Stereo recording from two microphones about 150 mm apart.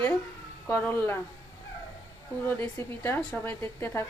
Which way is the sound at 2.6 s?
15° left (ahead or behind).